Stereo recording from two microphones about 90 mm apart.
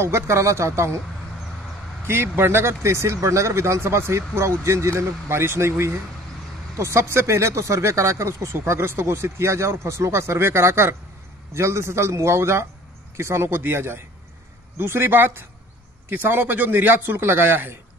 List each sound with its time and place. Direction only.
0.0 s speech: 30° right (ahead or behind)
2.0 s speech: 25° right (ahead or behind)